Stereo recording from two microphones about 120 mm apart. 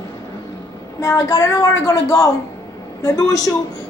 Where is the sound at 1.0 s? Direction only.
25° left (ahead or behind).